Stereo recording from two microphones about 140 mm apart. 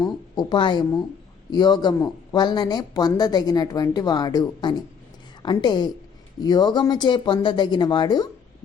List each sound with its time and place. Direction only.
0.0 s a woman's voice: 35° left (ahead or behind)